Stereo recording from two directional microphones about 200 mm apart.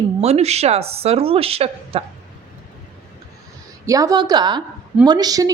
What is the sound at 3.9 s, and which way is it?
Speech, 15° right (ahead or behind).